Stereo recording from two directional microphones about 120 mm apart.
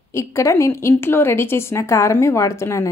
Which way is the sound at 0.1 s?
25° left (ahead or behind).